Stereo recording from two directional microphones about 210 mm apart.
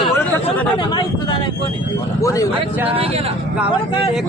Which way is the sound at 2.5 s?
10° right (ahead or behind).